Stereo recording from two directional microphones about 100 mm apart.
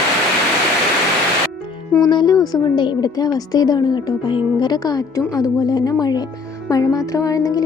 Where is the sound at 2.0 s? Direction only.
45° left (ahead or behind).